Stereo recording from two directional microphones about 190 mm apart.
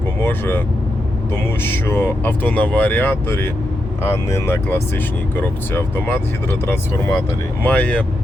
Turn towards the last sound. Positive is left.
turn(degrees=5)  # may be behind; listen again after turning